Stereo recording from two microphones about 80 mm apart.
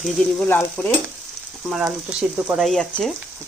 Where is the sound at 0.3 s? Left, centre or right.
Left.